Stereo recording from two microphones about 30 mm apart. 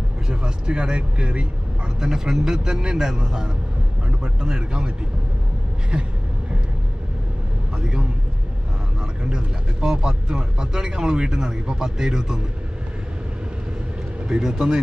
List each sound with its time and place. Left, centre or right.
0.3 s speech: right
2.0 s speech: centre
4.2 s speech: right
7.7 s a man's voice: right
9.3 s speech: right
14.4 s speech: right